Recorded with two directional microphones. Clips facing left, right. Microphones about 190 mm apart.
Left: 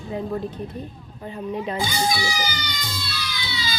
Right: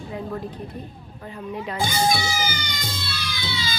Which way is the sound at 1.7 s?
50° right (ahead or behind).